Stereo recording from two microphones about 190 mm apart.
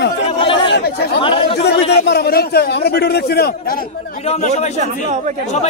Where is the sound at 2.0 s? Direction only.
60° left (ahead or behind).